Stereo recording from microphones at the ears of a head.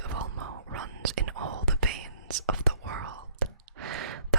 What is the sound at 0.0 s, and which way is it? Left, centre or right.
Whispering, right.